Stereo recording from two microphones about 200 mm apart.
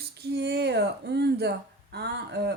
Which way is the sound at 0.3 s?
55° right (ahead or behind).